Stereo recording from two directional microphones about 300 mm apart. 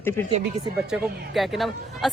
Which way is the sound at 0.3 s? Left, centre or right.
Right.